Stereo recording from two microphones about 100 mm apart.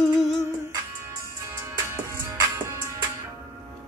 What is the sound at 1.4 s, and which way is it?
Music, 30° right (ahead or behind).